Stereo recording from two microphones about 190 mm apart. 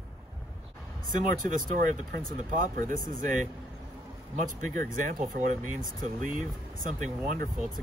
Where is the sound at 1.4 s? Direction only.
45° right (ahead or behind).